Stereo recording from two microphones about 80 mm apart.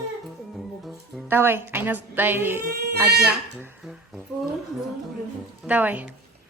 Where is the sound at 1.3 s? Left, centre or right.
Right.